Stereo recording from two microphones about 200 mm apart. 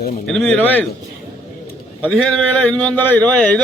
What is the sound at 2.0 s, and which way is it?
A man's voice, centre (ahead or behind).